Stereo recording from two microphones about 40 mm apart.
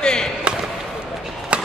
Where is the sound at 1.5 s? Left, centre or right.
Right.